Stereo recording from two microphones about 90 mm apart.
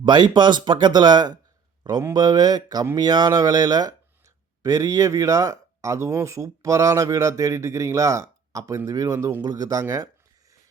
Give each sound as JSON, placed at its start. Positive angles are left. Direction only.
{"t": 0.0, "sound": "speech", "side_deg": -60}
{"t": 9.4, "sound": "speech", "side_deg": -45}